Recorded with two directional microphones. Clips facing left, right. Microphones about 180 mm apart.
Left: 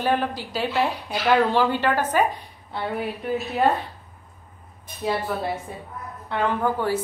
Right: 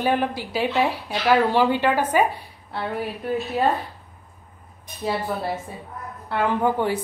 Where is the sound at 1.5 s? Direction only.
15° right (ahead or behind).